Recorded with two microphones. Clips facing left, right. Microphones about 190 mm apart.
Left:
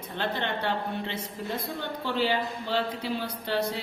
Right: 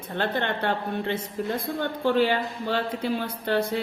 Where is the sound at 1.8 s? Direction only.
50° right (ahead or behind).